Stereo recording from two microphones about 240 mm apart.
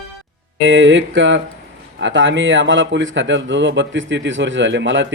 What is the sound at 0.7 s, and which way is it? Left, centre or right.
A man's voice, right.